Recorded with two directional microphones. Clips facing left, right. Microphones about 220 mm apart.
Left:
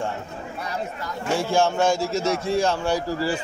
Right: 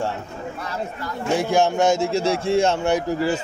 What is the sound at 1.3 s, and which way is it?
A man's voice, 20° right (ahead or behind).